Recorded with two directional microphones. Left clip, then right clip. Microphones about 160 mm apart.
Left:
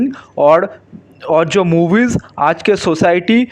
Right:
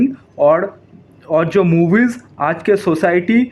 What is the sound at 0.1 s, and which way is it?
Speech, 35° left (ahead or behind).